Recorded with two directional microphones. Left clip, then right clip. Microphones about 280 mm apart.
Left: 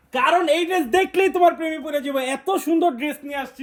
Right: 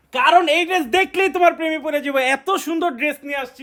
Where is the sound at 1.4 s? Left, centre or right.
Right.